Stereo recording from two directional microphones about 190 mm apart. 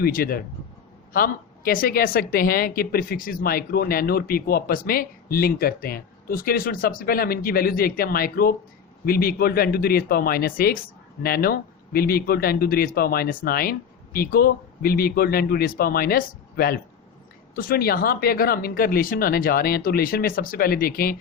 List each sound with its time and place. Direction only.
0.0 s speech: 50° left (ahead or behind)